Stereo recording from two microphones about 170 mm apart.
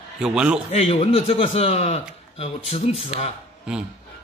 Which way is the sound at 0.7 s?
35° left (ahead or behind).